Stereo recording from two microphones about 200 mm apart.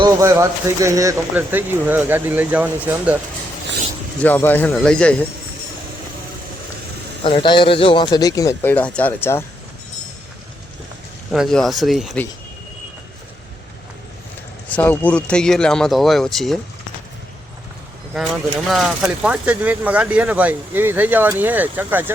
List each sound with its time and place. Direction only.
0.0 s speech: 15° right (ahead or behind)
4.2 s speech: 10° left (ahead or behind)
7.3 s speech: 25° left (ahead or behind)
11.3 s speech: centre (ahead or behind)
14.8 s speech: 10° left (ahead or behind)
18.7 s speech: centre (ahead or behind)